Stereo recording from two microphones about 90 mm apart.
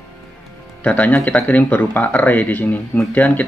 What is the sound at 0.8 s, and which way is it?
Speech, 15° left (ahead or behind).